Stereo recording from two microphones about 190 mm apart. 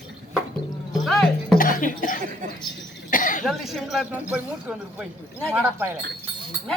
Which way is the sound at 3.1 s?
45° left (ahead or behind).